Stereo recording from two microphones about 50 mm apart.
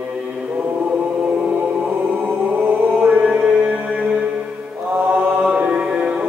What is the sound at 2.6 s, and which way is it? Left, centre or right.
Chant, right.